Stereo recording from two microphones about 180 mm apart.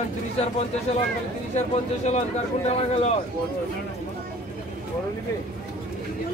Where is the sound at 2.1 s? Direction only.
40° left (ahead or behind).